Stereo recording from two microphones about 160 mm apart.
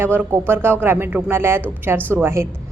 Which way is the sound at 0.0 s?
15° right (ahead or behind).